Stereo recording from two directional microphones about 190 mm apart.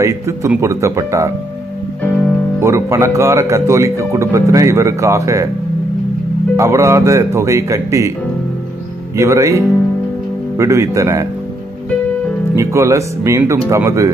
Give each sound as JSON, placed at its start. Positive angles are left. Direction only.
{"t": 0.0, "sound": "speech", "side_deg": -15}
{"t": 2.6, "sound": "speech", "side_deg": -15}
{"t": 6.5, "sound": "speech", "side_deg": -15}
{"t": 9.1, "sound": "speech", "side_deg": -15}
{"t": 12.5, "sound": "speech", "side_deg": -15}